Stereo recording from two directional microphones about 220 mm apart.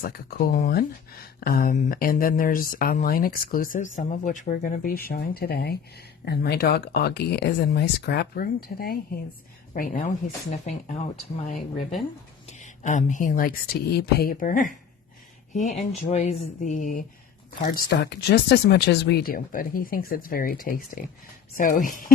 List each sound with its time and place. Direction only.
0.0 s speech: 40° left (ahead or behind)
12.5 s speech: 30° left (ahead or behind)
15.9 s speech: 30° left (ahead or behind)
17.6 s speech: 50° left (ahead or behind)